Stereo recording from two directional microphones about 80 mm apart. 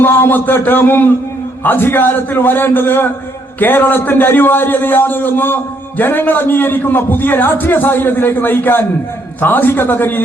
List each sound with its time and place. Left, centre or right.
0.0 s a man's voice: left